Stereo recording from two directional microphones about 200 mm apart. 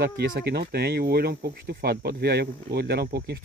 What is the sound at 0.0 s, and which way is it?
Speech, 55° right (ahead or behind).